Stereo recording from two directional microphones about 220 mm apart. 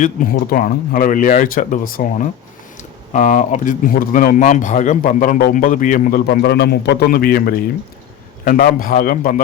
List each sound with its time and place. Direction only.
0.0 s speech: 40° left (ahead or behind)